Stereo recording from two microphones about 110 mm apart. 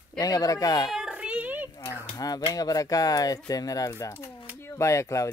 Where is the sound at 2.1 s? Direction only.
35° left (ahead or behind).